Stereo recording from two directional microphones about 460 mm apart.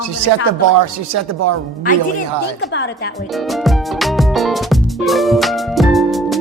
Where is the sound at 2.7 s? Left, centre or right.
Left.